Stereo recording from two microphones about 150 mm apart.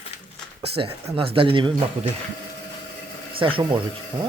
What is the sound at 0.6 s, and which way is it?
Speech, 40° right (ahead or behind).